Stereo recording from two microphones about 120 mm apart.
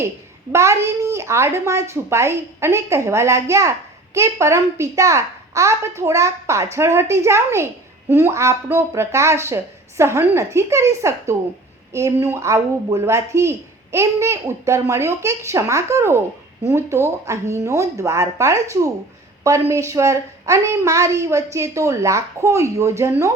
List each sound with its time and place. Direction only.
0.5 s speech: 25° right (ahead or behind)